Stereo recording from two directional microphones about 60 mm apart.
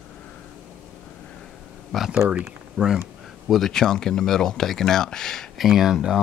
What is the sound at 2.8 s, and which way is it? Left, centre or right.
Speech, right.